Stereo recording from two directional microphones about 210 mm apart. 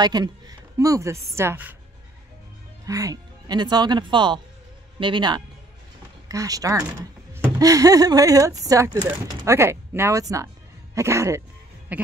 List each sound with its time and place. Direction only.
0.0 s speech: 20° right (ahead or behind)
2.8 s a man's voice: 15° right (ahead or behind)